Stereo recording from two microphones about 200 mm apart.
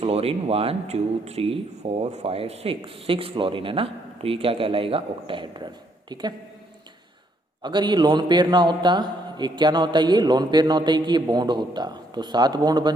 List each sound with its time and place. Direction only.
0.0 s speech: 30° right (ahead or behind)
7.6 s speech: 20° right (ahead or behind)